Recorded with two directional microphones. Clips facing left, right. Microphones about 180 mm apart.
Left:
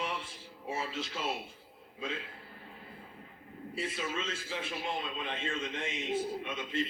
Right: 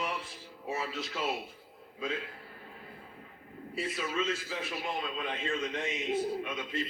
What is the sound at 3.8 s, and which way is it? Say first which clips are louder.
Speech: right 3 dB; 25° left (ahead or behind).